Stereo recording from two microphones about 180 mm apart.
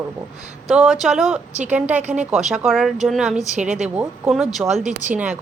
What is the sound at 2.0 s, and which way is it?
Speech, 40° right (ahead or behind).